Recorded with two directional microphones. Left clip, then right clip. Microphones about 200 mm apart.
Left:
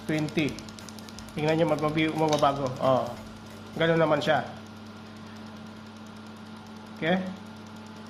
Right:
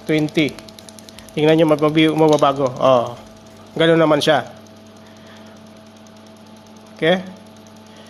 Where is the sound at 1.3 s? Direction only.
55° right (ahead or behind).